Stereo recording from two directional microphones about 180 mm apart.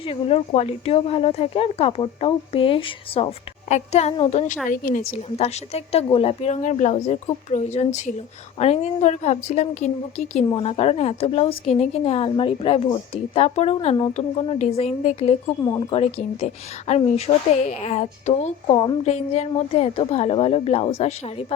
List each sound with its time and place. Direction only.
0.0 s a woman's voice: 35° left (ahead or behind)
4.7 s a woman's voice: 50° left (ahead or behind)
5.4 s a woman's voice: 35° left (ahead or behind)
15.6 s speech: 20° left (ahead or behind)
16.0 s a woman's voice: 35° left (ahead or behind)